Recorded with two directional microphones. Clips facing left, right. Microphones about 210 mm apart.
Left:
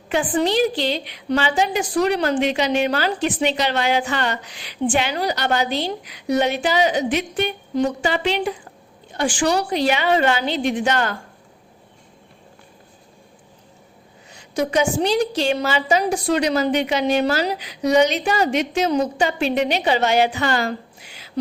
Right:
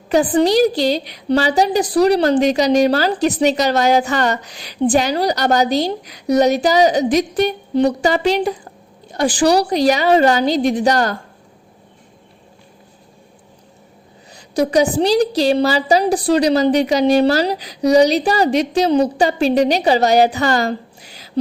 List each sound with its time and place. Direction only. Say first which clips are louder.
0.1 s a woman's voice: right 6 dB; 40° right (ahead or behind)
14.3 s a woman's voice: right 5 dB; 35° right (ahead or behind)